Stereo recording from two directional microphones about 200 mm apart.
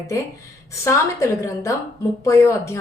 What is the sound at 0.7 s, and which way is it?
A woman's voice, 15° left (ahead or behind).